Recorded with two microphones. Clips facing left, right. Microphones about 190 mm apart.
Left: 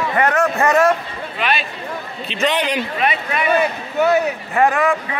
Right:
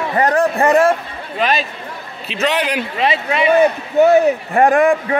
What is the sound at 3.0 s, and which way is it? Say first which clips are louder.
Speech: right 7 dB; 25° right (ahead or behind).